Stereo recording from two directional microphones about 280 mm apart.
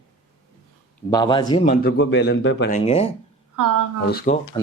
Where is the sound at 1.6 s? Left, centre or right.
Left.